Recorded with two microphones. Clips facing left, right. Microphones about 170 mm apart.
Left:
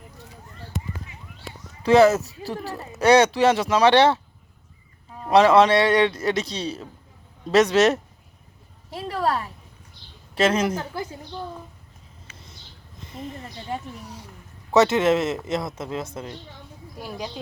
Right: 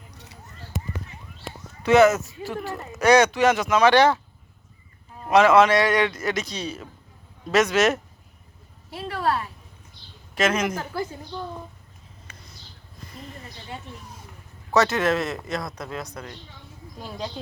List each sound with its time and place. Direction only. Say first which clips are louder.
0.1 s a sound: left 3 dB; 75° right (ahead or behind)
1.8 s speech: left 1 dB; 30° left (ahead or behind)
5.3 s speech: left 1 dB; 30° left (ahead or behind)
10.8 s speech: right 1 dB; 20° left (ahead or behind)
14.7 s speech: left 3 dB; 20° left (ahead or behind)